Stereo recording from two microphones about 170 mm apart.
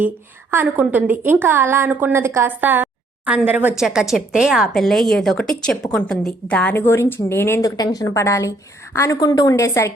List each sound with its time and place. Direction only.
0.5 s a woman's voice: 10° right (ahead or behind); by 9.9 s 20° left (ahead or behind)